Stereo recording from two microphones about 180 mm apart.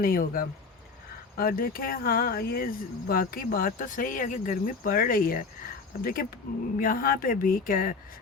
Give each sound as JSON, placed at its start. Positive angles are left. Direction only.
{"t": 0.0, "sound": "speech", "side_deg": 55}